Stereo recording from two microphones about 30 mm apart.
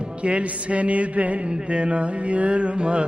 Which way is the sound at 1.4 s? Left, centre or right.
Right.